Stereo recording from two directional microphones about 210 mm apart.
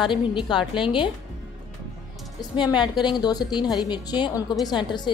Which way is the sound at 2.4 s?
20° left (ahead or behind).